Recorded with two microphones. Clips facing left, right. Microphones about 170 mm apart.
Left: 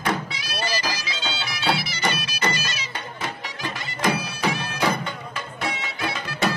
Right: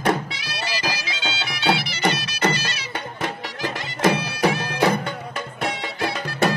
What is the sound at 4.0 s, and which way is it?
Bagpipes, 50° right (ahead or behind).